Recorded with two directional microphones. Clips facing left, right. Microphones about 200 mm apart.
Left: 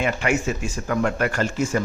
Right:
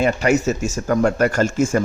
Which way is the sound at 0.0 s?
40° right (ahead or behind).